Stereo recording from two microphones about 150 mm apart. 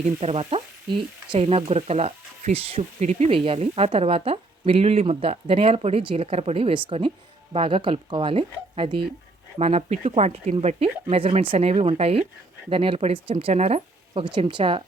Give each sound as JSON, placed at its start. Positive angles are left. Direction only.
{"t": 0.0, "sound": "speech", "side_deg": -45}